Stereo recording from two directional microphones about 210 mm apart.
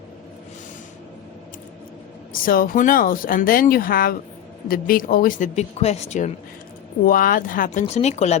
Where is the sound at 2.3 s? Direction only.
45° left (ahead or behind).